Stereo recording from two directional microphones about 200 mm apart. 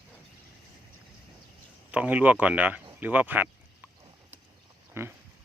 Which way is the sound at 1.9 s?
5° right (ahead or behind).